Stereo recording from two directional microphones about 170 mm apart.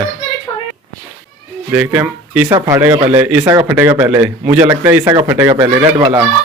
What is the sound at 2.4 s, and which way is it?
Speech, 25° right (ahead or behind).